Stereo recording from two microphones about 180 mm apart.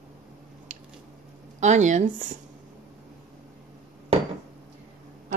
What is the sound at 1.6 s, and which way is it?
Speech, 40° right (ahead or behind).